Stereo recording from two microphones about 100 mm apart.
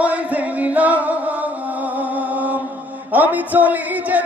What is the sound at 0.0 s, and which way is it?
Music, 15° right (ahead or behind).